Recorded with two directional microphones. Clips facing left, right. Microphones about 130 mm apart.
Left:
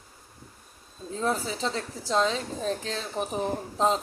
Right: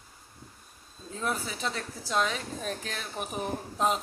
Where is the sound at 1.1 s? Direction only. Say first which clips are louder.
Left 5 dB; 30° left (ahead or behind).